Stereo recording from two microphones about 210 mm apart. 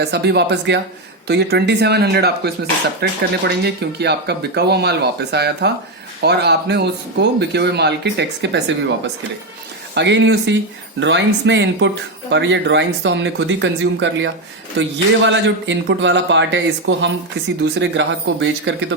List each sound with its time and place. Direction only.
0.0 s speech: 50° right (ahead or behind)
9.9 s a man's voice: 55° right (ahead or behind)